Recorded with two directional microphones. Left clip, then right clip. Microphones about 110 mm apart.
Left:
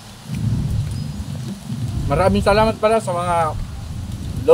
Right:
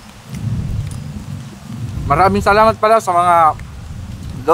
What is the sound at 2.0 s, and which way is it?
Speech, 35° right (ahead or behind).